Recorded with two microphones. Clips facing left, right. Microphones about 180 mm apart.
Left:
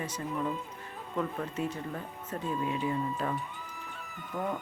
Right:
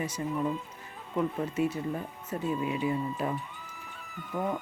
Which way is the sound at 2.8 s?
10° right (ahead or behind).